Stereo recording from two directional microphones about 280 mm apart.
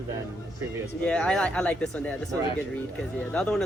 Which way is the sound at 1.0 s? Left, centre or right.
Centre.